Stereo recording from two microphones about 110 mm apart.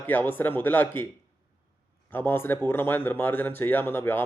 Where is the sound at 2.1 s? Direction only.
20° left (ahead or behind).